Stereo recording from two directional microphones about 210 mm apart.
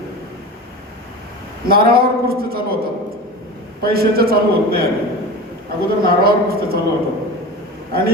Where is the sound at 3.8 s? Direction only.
45° right (ahead or behind).